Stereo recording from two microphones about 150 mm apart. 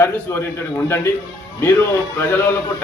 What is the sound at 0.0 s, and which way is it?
Speech, 15° left (ahead or behind).